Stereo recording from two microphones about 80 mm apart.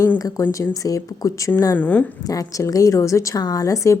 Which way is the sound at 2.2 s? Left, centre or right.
Left.